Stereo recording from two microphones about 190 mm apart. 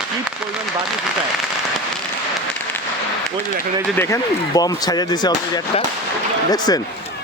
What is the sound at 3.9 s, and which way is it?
Speech, 15° left (ahead or behind).